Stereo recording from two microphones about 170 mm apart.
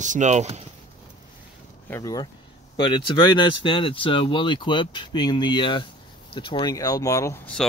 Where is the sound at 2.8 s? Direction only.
25° left (ahead or behind).